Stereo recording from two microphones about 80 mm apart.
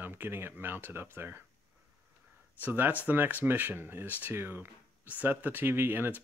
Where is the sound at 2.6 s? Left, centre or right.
Right.